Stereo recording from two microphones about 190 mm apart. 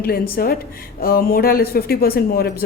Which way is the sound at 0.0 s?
50° left (ahead or behind).